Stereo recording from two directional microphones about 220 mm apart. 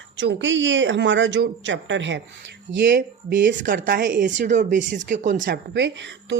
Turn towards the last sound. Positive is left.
turn(degrees=-55)  # may be behind; listen again after turning